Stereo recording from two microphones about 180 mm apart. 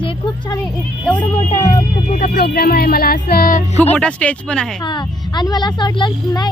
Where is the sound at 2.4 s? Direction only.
60° left (ahead or behind).